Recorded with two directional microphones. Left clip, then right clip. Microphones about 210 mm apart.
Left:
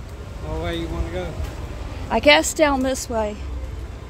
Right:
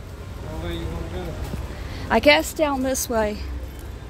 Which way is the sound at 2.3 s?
10° left (ahead or behind).